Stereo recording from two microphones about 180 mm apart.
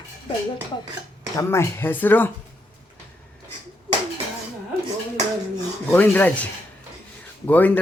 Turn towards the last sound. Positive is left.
turn(degrees=10)  # may be behind; listen again after turning